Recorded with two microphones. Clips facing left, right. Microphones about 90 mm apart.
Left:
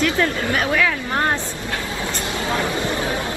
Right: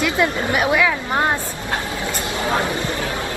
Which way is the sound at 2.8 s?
20° left (ahead or behind).